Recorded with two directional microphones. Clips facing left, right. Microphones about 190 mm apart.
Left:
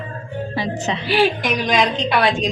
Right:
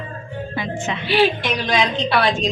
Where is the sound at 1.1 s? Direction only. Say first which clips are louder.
Even; 10° left (ahead or behind).